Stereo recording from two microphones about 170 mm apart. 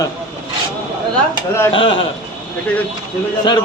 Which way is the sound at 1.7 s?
30° left (ahead or behind).